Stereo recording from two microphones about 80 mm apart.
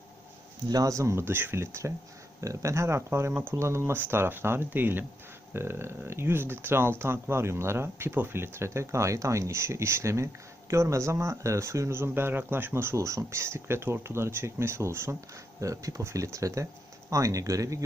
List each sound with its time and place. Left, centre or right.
0.7 s speech: right